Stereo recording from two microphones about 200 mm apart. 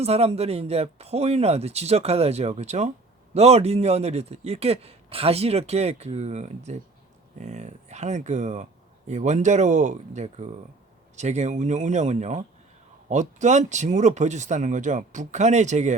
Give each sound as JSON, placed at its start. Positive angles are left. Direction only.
{"t": 0.0, "sound": "speech", "side_deg": -30}